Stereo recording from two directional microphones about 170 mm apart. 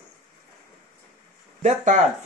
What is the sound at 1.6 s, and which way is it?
Speech, 45° right (ahead or behind).